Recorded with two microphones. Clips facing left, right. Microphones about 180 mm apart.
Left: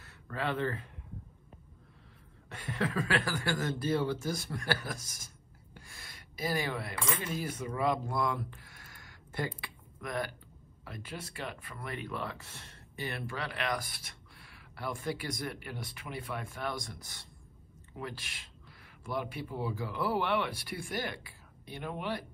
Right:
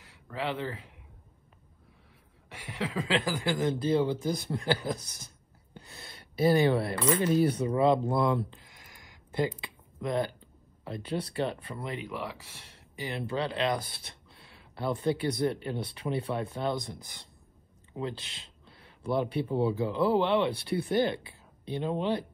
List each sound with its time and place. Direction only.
0.0 s speech: 10° right (ahead or behind)
2.5 s speech: 10° right (ahead or behind)
3.0 s speech: 20° right (ahead or behind)
5.8 s a sound: 25° right (ahead or behind)
7.2 s speech: 30° right (ahead or behind)
9.6 s a sound: 25° right (ahead or behind)
10.8 s speech: 25° right (ahead or behind)
12.0 s speech: 10° right (ahead or behind)
13.1 s speech: 25° right (ahead or behind)